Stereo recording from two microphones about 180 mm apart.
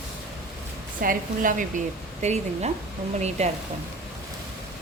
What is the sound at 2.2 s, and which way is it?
Speech, 40° right (ahead or behind).